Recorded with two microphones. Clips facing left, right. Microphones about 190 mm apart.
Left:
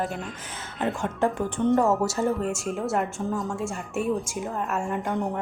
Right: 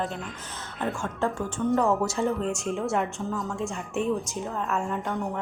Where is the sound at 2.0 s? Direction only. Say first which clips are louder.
Left 1 dB; 5° left (ahead or behind).